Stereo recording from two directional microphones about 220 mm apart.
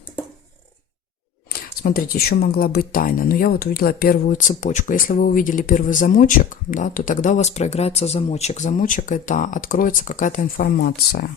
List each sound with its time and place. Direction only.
1.5 s speech: 40° left (ahead or behind)